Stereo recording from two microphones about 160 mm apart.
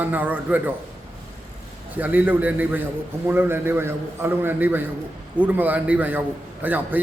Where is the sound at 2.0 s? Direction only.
10° right (ahead or behind).